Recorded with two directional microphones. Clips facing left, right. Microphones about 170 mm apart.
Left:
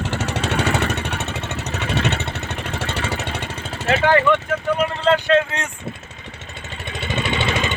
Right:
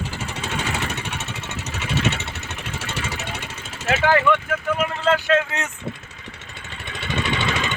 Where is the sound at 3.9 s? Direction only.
5° right (ahead or behind).